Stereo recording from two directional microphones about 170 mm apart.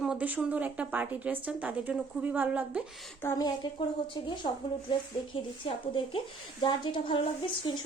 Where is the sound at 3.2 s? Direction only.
25° left (ahead or behind).